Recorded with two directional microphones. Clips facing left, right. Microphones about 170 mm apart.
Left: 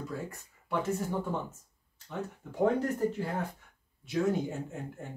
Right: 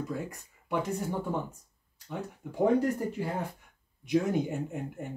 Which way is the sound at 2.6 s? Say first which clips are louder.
Right 2 dB; 10° right (ahead or behind).